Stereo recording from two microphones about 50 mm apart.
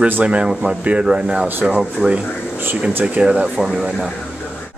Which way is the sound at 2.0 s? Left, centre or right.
Right.